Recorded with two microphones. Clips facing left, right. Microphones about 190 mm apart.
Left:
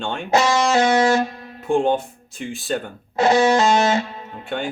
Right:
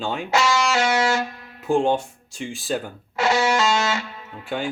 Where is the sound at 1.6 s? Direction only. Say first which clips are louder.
Left 1 dB; centre (ahead or behind).